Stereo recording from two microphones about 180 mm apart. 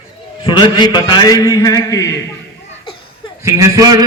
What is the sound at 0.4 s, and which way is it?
A man's voice, 25° left (ahead or behind).